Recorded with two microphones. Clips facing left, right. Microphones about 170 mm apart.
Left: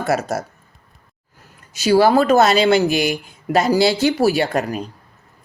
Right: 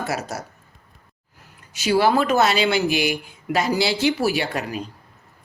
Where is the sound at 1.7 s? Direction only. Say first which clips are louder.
Left 5 dB; 40° left (ahead or behind).